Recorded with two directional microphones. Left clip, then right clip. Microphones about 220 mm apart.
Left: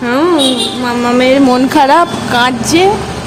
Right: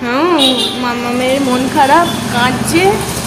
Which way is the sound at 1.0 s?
50° left (ahead or behind).